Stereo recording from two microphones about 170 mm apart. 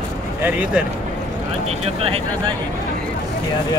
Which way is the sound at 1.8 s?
35° right (ahead or behind).